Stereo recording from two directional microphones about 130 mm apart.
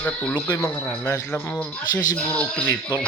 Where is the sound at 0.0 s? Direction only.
15° left (ahead or behind).